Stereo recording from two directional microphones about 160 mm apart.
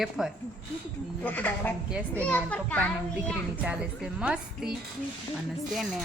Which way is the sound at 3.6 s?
5° right (ahead or behind).